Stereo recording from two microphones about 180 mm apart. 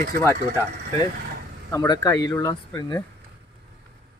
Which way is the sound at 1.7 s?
20° left (ahead or behind).